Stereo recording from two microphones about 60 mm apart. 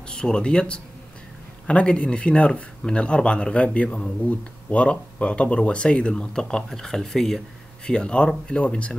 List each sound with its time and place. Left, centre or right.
0.1 s speech: centre